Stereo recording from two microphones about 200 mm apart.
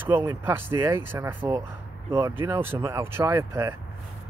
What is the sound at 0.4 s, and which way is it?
Speech, 10° right (ahead or behind).